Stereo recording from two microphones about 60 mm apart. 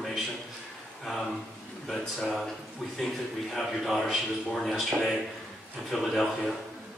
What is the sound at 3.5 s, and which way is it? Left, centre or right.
Speech, centre.